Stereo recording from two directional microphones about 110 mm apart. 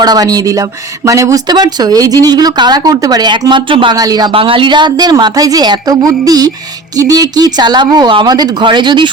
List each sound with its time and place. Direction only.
0.0 s speech: 35° right (ahead or behind)
3.9 s speech: 35° right (ahead or behind)
4.3 s speech: 50° right (ahead or behind)